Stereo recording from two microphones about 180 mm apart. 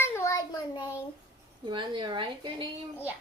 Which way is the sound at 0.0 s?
15° left (ahead or behind).